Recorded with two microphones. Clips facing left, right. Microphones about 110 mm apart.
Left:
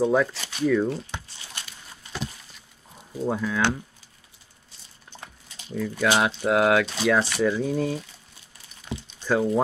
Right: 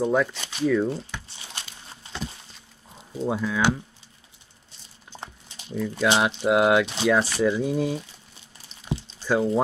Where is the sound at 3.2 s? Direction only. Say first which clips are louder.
Right 1 dB; 5° right (ahead or behind).